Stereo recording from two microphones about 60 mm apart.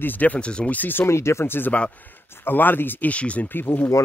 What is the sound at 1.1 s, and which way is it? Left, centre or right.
Speech, left.